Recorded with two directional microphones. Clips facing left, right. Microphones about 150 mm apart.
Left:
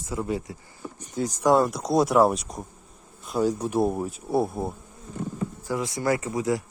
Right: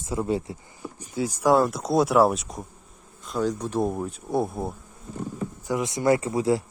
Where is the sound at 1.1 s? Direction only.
5° right (ahead or behind).